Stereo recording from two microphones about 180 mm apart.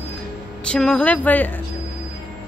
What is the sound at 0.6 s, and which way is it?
Speech, 5° left (ahead or behind).